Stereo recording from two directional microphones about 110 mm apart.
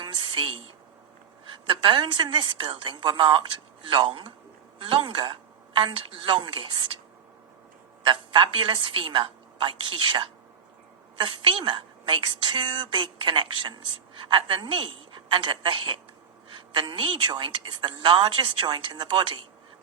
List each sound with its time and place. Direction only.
0.0 s a sound: 50° right (ahead or behind)
1.5 s a woman's voice: 45° right (ahead or behind)
8.0 s a woman's voice: 45° right (ahead or behind)